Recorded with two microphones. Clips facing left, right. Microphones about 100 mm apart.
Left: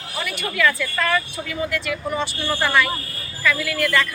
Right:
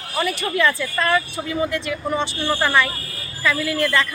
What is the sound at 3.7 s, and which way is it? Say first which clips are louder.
Speech: right 2 dB; 30° right (ahead or behind).